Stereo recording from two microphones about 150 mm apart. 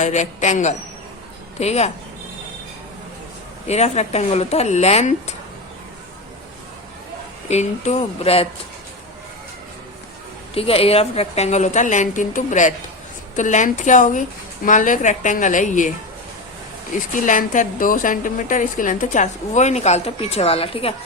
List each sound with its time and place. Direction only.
0.0 s speech: 55° left (ahead or behind)
3.7 s speech: 45° left (ahead or behind)
7.4 s speech: 50° left (ahead or behind)
10.5 s a woman's voice: 40° left (ahead or behind); by 15.9 s 60° left (ahead or behind)
16.9 s a woman's voice: 60° left (ahead or behind); by 20.9 s 40° left (ahead or behind)